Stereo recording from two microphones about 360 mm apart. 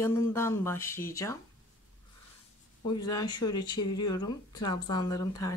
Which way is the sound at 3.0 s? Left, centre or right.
Centre.